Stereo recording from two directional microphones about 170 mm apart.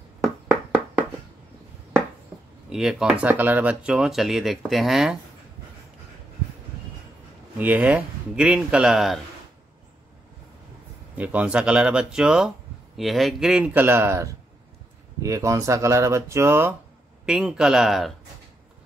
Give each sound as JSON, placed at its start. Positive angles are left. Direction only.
{"t": 0.2, "sound": "a sound", "side_deg": 0}
{"t": 2.7, "sound": "speech", "side_deg": 0}
{"t": 7.5, "sound": "speech", "side_deg": -10}
{"t": 11.1, "sound": "speech", "side_deg": -10}
{"t": 17.3, "sound": "speech", "side_deg": -5}